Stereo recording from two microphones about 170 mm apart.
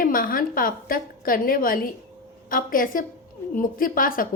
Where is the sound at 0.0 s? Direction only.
55° left (ahead or behind).